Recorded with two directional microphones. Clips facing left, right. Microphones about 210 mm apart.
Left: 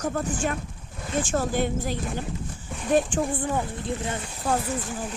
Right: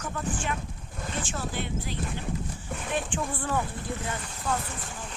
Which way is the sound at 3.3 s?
15° left (ahead or behind).